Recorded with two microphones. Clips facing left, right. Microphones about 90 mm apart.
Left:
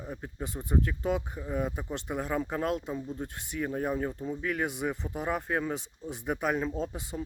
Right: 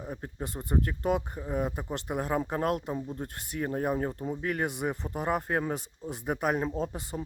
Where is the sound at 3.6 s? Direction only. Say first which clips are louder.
Right 1 dB; 40° right (ahead or behind).